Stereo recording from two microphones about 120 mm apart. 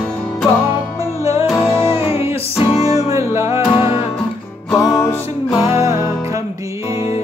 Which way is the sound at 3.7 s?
45° left (ahead or behind).